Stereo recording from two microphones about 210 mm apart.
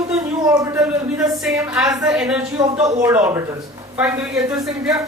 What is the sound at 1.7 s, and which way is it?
Speech, centre (ahead or behind).